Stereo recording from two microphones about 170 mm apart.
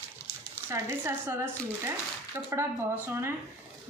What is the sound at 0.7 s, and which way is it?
A woman's voice, 15° right (ahead or behind).